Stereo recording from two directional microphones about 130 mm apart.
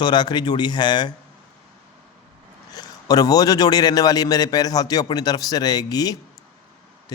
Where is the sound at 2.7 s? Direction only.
30° left (ahead or behind).